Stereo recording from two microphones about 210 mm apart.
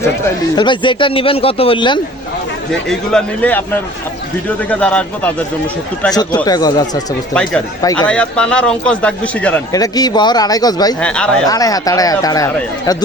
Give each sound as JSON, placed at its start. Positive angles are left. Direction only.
{"t": 0.5, "sound": "speech", "side_deg": 20}
{"t": 3.1, "sound": "speech", "side_deg": 5}
{"t": 6.1, "sound": "speech", "side_deg": 20}
{"t": 7.3, "sound": "a man's voice", "side_deg": 5}
{"t": 9.7, "sound": "speech", "side_deg": 15}
{"t": 11.0, "sound": "a man's voice", "side_deg": 5}
{"t": 11.4, "sound": "speech", "side_deg": 15}